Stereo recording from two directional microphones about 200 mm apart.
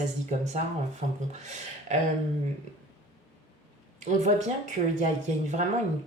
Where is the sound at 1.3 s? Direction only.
35° right (ahead or behind).